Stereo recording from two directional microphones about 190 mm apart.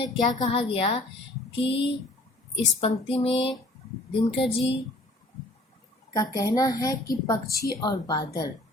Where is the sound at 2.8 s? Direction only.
30° left (ahead or behind).